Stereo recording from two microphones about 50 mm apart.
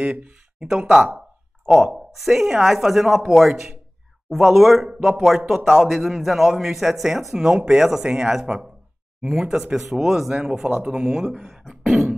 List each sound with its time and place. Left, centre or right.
0.0 s speech: right
2.1 s a man's voice: centre